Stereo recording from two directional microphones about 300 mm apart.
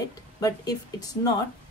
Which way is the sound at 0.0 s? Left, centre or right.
Centre.